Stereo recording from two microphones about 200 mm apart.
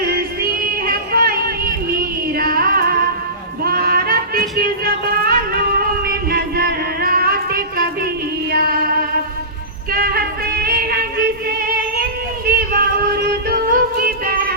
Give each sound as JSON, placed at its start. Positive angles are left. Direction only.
{"t": 0.0, "sound": "a sound", "side_deg": -50}
{"t": 2.4, "sound": "music", "side_deg": -50}
{"t": 5.8, "sound": "a sound", "side_deg": -50}
{"t": 8.5, "sound": "female singing", "side_deg": -50}
{"t": 9.9, "sound": "music", "side_deg": -50}
{"t": 12.5, "sound": "yodeling", "side_deg": -50}